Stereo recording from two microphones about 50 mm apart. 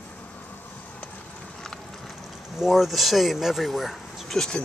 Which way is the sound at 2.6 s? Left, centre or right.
Centre.